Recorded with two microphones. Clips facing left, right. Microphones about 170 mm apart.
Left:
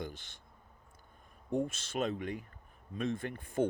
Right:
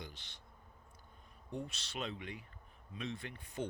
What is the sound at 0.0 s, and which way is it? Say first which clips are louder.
Insect: left 9 dB; 50° left (ahead or behind).